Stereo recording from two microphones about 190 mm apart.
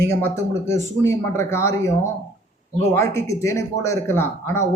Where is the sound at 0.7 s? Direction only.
15° left (ahead or behind).